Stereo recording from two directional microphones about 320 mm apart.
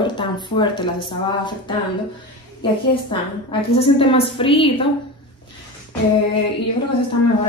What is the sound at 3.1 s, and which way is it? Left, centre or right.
Speech, centre.